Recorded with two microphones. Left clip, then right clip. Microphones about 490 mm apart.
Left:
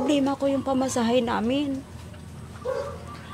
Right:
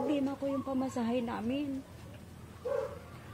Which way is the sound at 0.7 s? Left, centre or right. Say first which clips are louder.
Left 11 dB; left.